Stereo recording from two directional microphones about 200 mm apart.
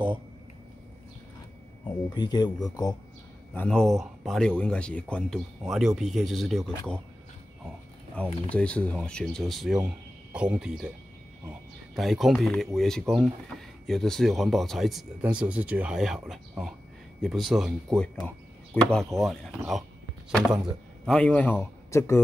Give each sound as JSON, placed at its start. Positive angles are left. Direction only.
{"t": 1.9, "sound": "speech", "side_deg": 20}
{"t": 3.5, "sound": "speech", "side_deg": 5}
{"t": 8.5, "sound": "speech", "side_deg": 5}
{"t": 11.9, "sound": "speech", "side_deg": 0}